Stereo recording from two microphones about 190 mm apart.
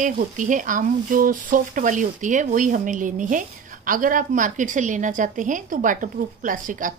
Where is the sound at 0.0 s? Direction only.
45° right (ahead or behind).